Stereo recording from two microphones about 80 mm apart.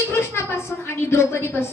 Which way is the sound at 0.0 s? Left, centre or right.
Left.